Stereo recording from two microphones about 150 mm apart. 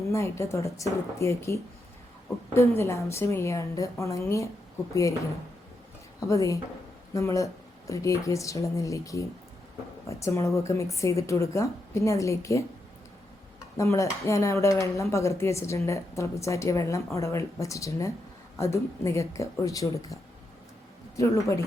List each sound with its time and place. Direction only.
0.1 s speech: 20° left (ahead or behind)
6.1 s speech: 20° left (ahead or behind)
13.7 s speech: 20° left (ahead or behind)
21.2 s speech: 20° left (ahead or behind)